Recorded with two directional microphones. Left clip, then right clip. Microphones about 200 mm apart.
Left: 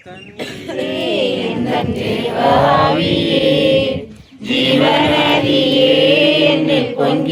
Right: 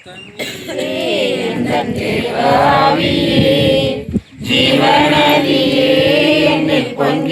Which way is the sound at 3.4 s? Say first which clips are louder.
Even; 65° right (ahead or behind).